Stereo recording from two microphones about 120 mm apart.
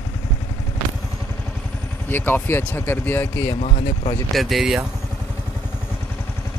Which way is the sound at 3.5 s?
65° left (ahead or behind).